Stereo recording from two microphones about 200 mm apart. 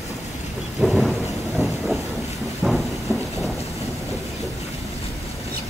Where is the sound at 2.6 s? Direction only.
Centre (ahead or behind).